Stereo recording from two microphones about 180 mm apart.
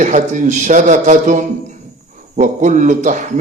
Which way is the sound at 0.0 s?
40° right (ahead or behind).